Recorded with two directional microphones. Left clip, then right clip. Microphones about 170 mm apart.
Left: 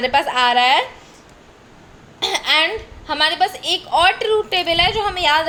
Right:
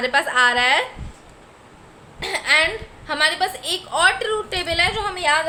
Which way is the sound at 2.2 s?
30° left (ahead or behind).